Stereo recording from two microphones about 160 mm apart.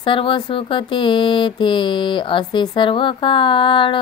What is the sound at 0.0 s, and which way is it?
A woman's voice, 30° left (ahead or behind).